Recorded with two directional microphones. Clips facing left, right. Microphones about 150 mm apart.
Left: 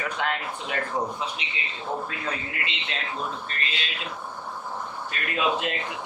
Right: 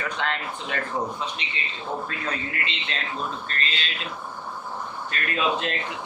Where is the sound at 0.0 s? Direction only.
10° left (ahead or behind).